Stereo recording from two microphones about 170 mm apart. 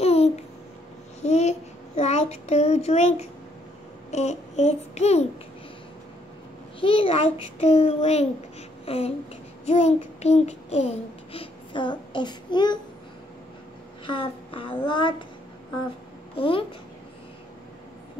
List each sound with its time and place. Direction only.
0.0 s babbling: 40° left (ahead or behind)
1.2 s child singing: 40° left (ahead or behind)
6.8 s child singing: 30° left (ahead or behind)
8.8 s a sound: 35° left (ahead or behind)
9.7 s child singing: 40° left (ahead or behind)
14.0 s child singing: 30° left (ahead or behind)
16.3 s child singing: 30° left (ahead or behind)